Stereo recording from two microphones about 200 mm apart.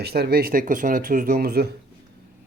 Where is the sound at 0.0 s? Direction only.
50° right (ahead or behind).